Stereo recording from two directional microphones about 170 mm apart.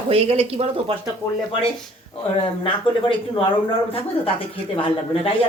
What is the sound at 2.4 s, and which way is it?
A woman's voice, 30° left (ahead or behind).